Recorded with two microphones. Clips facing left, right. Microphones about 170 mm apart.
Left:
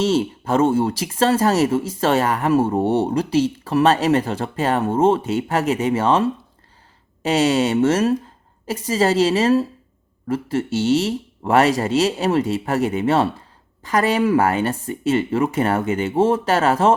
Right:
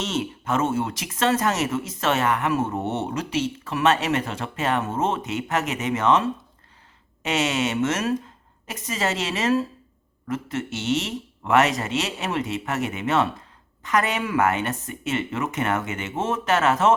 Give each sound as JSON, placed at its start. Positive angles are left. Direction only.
{"t": 0.0, "sound": "speech", "side_deg": 35}